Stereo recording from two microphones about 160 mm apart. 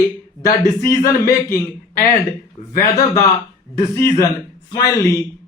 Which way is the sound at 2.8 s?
20° left (ahead or behind).